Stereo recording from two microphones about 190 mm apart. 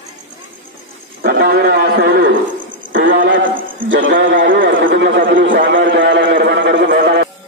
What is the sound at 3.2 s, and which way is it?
Horse, 80° right.